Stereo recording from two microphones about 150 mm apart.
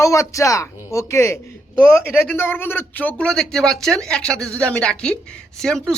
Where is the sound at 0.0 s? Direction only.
20° left (ahead or behind).